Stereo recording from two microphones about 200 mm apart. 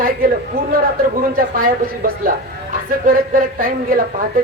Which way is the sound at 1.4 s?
45° right (ahead or behind).